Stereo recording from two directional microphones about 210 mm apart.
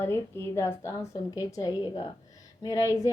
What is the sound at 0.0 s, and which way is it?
Speech, 10° left (ahead or behind).